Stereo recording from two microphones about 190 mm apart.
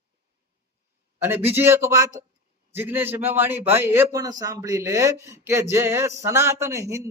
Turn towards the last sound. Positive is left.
turn(degrees=-15)  # may be behind; listen again after turning